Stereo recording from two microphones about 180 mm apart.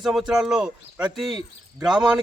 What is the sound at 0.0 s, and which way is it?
A man's voice, centre (ahead or behind).